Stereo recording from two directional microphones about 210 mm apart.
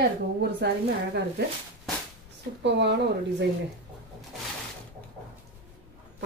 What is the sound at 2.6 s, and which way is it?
Speech, 55° right (ahead or behind).